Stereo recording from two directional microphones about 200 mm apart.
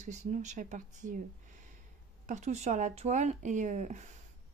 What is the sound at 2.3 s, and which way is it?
Speech, 35° right (ahead or behind).